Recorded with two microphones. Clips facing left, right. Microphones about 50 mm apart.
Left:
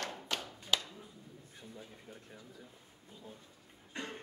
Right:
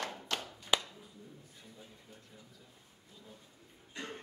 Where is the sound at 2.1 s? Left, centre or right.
Left.